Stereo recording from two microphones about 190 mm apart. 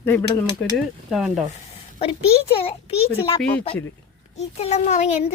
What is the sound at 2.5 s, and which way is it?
A child's voice, 30° left (ahead or behind).